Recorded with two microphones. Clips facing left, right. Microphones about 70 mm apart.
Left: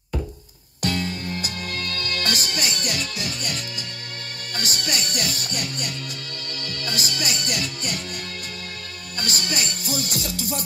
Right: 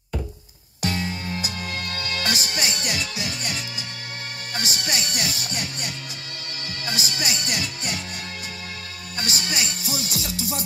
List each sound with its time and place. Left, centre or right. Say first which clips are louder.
0.9 s music: left 1 dB; right
2.2 s music: right 1 dB; left
9.2 s music: even; left